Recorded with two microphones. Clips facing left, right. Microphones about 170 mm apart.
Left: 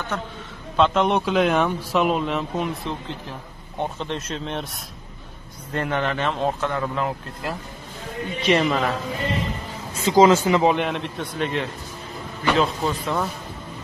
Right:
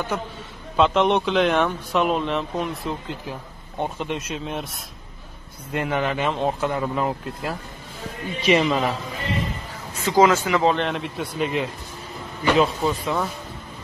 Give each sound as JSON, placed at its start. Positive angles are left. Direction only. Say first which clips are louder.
{"t": 0.1, "sound": "speech", "louder": "right 1 dB", "side_deg": -10}
{"t": 5.7, "sound": "speech", "louder": "right 1 dB", "side_deg": -10}
{"t": 9.9, "sound": "speech", "louder": "left 2 dB", "side_deg": 20}
{"t": 10.9, "sound": "speech", "louder": "even", "side_deg": -5}